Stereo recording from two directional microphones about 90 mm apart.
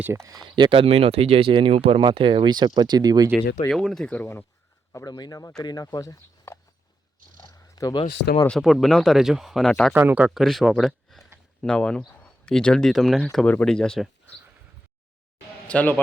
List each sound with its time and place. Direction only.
0.0 s speech: 30° right (ahead or behind)
0.4 s speech: 60° right (ahead or behind); by 3.2 s 45° right (ahead or behind)
3.7 s speech: 5° left (ahead or behind)
4.1 s speech: 25° left (ahead or behind)
5.0 s speech: 50° left (ahead or behind)
7.9 s speech: 65° left (ahead or behind)
8.4 s speech: 5° left (ahead or behind)
9.9 s speech: 20° right (ahead or behind)
10.3 s speech: centre (ahead or behind)
13.4 s speech: 15° left (ahead or behind)
15.6 s a man's voice: 15° left (ahead or behind)